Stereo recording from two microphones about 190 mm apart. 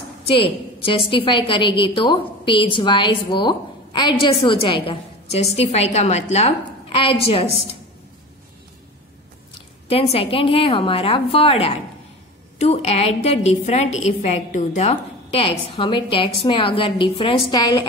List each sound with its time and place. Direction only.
0.4 s a woman's voice: 30° left (ahead or behind)
9.8 s a woman's voice: 30° left (ahead or behind)